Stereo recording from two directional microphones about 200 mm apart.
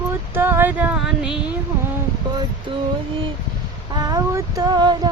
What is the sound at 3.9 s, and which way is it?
Child singing, 20° right (ahead or behind).